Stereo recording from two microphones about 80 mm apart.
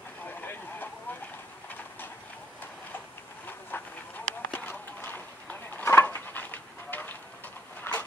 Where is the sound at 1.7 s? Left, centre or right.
Left.